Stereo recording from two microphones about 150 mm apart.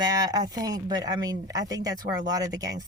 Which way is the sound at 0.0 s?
25° right (ahead or behind).